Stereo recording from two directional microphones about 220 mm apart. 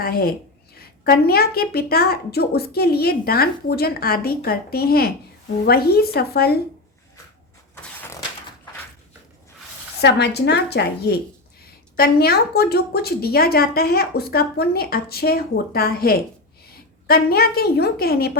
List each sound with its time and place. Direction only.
0.0 s a woman's voice: 45° left (ahead or behind)
10.0 s a woman's voice: 50° left (ahead or behind)